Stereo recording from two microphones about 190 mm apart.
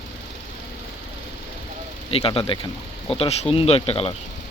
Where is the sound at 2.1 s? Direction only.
30° left (ahead or behind).